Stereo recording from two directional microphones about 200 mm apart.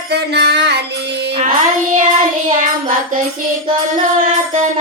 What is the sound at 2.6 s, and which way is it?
Music, 45° right (ahead or behind).